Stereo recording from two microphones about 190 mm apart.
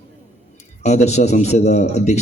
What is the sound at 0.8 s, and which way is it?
A man's voice, 35° left (ahead or behind).